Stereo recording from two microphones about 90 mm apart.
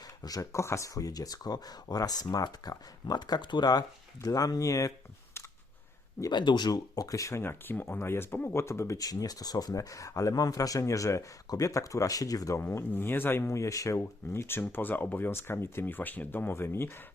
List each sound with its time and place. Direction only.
0.2 s speech: 45° left (ahead or behind)
6.3 s speech: 55° left (ahead or behind); by 9.0 s 30° left (ahead or behind)
9.0 s speech: 45° left (ahead or behind)
12.5 s speech: 25° left (ahead or behind)